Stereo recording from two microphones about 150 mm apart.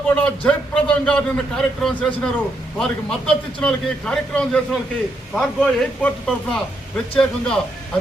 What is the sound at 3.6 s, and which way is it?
A man's voice, 5° left (ahead or behind).